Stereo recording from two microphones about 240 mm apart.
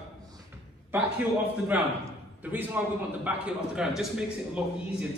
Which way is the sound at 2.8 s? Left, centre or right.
Centre.